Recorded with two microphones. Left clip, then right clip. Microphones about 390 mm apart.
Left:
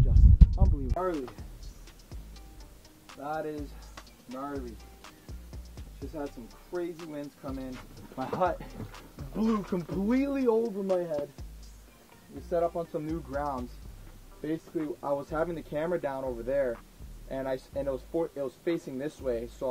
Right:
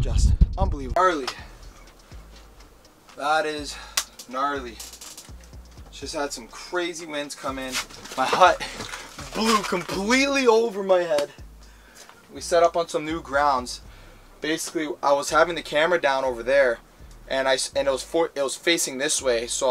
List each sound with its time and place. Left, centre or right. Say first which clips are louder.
0.2 s music: right 1 dB; centre
0.6 s music: right 17 dB; centre
3.1 s speech: right 12 dB; centre
6.1 s speech: right 10 dB; centre
12.4 s speech: right 10 dB; centre